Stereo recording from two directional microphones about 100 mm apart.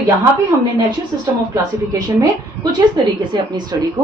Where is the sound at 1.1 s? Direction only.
40° right (ahead or behind).